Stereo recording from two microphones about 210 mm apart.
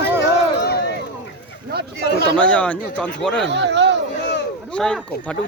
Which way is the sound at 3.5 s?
55° right (ahead or behind).